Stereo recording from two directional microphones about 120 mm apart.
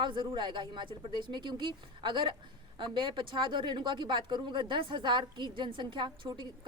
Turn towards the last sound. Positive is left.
turn(degrees=-40)  # may be behind; listen again after turning